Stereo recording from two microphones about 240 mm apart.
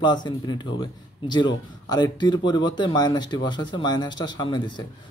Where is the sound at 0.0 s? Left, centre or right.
Centre.